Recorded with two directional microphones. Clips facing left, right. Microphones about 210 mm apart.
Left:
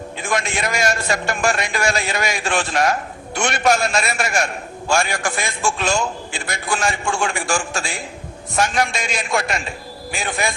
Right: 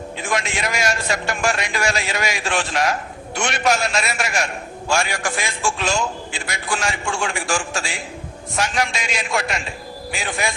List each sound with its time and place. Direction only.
0.3 s a man's voice: 50° left (ahead or behind)